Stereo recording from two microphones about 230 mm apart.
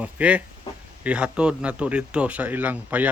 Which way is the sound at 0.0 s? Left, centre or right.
Centre.